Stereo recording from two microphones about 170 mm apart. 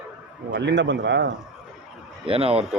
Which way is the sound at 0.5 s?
90° right.